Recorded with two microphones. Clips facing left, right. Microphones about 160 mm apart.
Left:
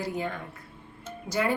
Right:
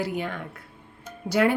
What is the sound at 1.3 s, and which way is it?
Speech, 75° right (ahead or behind).